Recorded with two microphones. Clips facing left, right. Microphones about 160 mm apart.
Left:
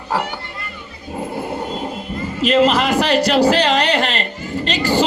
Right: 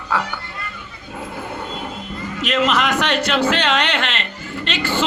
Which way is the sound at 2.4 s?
35° left (ahead or behind).